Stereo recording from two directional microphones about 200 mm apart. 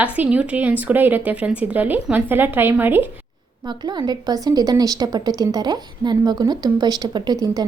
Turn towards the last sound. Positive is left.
turn(degrees=-20)  # may be behind; listen again after turning